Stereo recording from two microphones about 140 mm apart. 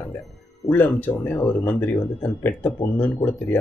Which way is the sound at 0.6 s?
15° left (ahead or behind).